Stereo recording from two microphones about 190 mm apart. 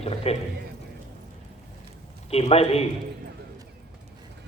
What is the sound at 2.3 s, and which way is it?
Speech, 35° left (ahead or behind).